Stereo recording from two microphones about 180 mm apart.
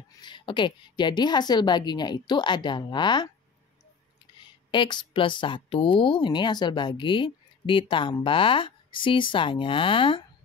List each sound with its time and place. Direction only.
0.2 s speech: 25° left (ahead or behind)
4.4 s speech: 25° left (ahead or behind)